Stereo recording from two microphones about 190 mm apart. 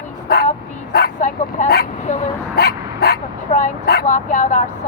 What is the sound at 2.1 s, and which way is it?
Vehicle, 40° left (ahead or behind).